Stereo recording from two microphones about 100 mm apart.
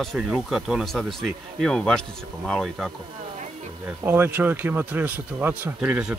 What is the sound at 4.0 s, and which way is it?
Speech, 20° right (ahead or behind).